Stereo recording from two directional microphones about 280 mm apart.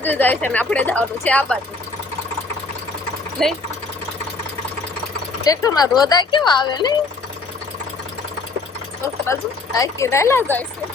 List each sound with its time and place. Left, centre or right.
0.0 s a woman's voice: centre
3.4 s a woman's voice: centre
5.5 s speech: centre
9.2 s speech: centre